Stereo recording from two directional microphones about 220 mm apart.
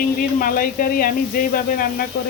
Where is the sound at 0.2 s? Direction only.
40° left (ahead or behind).